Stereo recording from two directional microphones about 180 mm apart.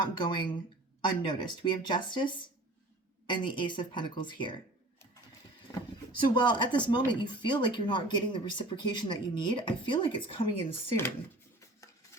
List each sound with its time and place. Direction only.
0.1 s speech: 25° left (ahead or behind)
6.1 s speech: 25° left (ahead or behind)